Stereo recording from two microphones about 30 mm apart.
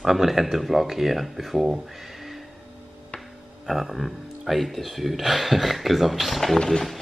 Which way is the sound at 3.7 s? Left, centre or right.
Centre.